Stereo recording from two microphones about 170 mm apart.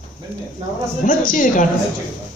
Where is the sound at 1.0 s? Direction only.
50° left (ahead or behind).